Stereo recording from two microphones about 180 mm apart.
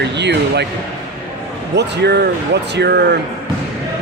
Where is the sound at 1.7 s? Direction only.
70° right (ahead or behind).